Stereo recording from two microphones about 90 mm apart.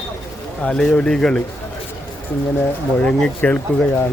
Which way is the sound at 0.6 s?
10° left (ahead or behind).